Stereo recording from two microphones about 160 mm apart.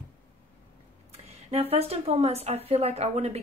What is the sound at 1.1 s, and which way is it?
A woman's voice, 40° right (ahead or behind).